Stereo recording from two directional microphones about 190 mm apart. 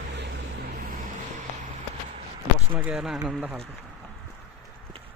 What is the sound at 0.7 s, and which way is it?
Vehicle, 45° right (ahead or behind).